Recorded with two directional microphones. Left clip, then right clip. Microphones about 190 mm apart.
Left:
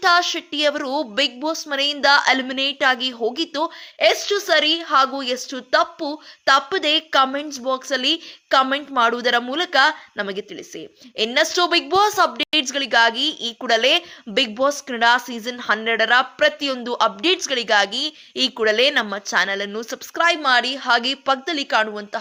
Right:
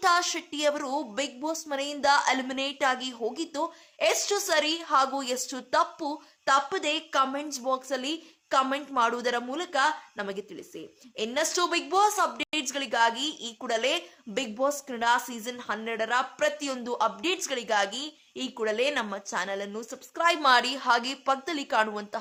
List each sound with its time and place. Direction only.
0.0 s a woman's voice: 10° left (ahead or behind)
20.3 s a woman's voice: 10° left (ahead or behind)